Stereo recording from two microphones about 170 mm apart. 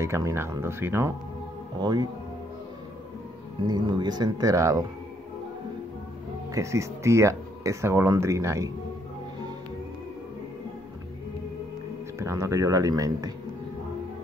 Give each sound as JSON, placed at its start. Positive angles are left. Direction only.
{"t": 0.0, "sound": "speech", "side_deg": -15}
{"t": 1.8, "sound": "speech", "side_deg": -25}
{"t": 3.6, "sound": "speech", "side_deg": -25}
{"t": 6.5, "sound": "speech", "side_deg": -15}
{"t": 12.2, "sound": "speech", "side_deg": -15}